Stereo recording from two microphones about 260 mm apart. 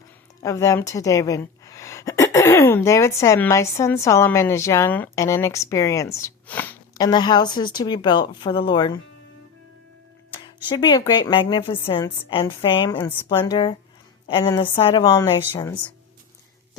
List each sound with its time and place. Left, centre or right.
0.4 s a woman's voice: centre
10.4 s a woman's voice: centre